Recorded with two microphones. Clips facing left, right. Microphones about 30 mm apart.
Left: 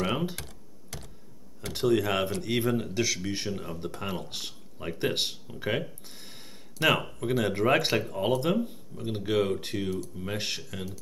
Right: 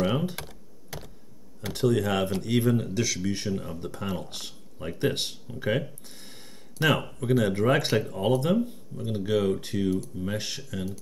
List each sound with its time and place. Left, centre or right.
0.0 s computer keyboard: centre
0.4 s computer keyboard: centre
1.7 s speech: centre